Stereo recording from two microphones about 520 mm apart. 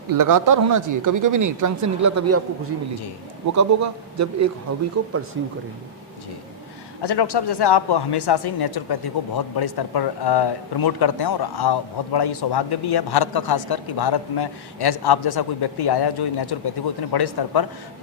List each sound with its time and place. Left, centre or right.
0.1 s speech: right
3.5 s speech: right
7.0 s speech: left